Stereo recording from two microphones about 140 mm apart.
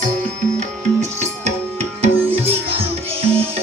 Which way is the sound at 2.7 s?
45° right (ahead or behind).